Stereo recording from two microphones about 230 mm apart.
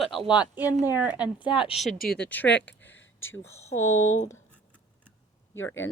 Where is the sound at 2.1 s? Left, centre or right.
Centre.